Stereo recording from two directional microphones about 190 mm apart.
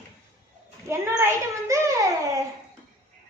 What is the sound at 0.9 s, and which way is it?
A woman's voice, 15° right (ahead or behind).